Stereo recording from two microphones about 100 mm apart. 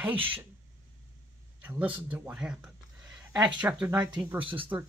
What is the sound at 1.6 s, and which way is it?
Speech, 15° right (ahead or behind).